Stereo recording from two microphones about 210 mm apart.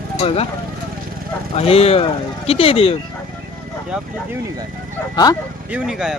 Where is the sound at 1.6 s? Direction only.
30° left (ahead or behind).